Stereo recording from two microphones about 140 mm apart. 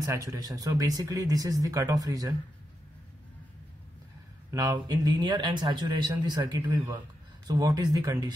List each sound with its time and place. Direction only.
0.0 s speech: 25° right (ahead or behind)
4.5 s a man's voice: 25° right (ahead or behind)
6.7 s a man's voice: 15° right (ahead or behind)
7.4 s speech: 30° right (ahead or behind)